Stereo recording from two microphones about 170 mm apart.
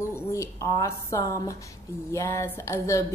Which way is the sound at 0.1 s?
15° left (ahead or behind).